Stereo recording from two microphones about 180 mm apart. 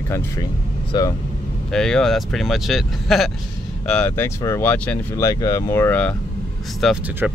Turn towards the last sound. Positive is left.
turn(degrees=-5)  # may be behind; listen again after turning